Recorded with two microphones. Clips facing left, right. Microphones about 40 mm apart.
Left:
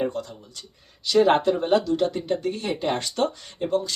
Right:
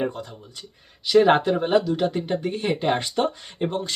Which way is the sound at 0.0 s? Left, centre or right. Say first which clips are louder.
Left 1 dB; centre.